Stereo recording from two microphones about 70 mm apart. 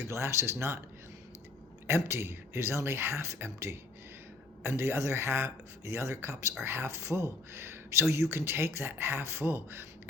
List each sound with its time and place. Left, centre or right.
0.1 s speech: right
1.9 s speech: right